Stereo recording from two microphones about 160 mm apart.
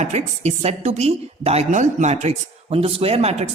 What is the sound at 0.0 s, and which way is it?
A woman's voice, 45° right (ahead or behind).